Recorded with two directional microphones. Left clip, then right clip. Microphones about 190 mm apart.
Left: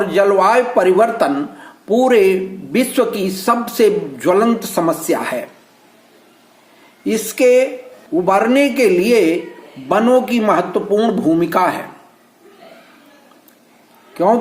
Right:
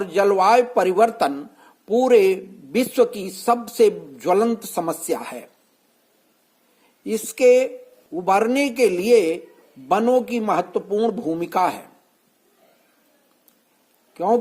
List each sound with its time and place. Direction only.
0.0 s a man's voice: 40° right (ahead or behind)
7.0 s a man's voice: 45° right (ahead or behind)
14.1 s speech: 40° right (ahead or behind)